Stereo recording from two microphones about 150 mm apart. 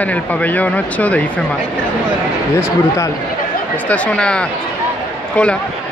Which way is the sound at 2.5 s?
20° left (ahead or behind).